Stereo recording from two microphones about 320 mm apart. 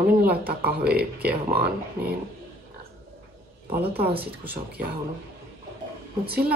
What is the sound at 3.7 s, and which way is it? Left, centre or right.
Speech, right.